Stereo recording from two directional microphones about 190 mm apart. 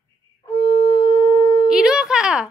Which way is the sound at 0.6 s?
25° left (ahead or behind).